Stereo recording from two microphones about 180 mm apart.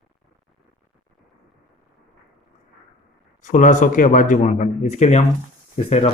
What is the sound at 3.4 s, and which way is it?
A man's voice, 45° left (ahead or behind).